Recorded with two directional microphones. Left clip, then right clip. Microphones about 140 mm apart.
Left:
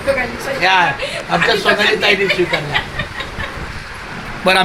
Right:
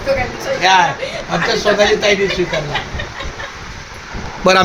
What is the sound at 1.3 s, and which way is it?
Speech, 30° left (ahead or behind).